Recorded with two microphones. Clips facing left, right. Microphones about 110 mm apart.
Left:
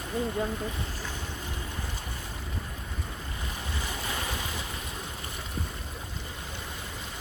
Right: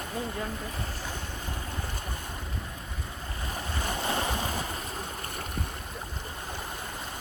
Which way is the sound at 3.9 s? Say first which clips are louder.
Right 7 dB; 45° right (ahead or behind).